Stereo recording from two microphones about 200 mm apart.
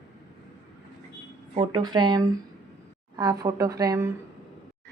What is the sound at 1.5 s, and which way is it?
Speech, 25° right (ahead or behind).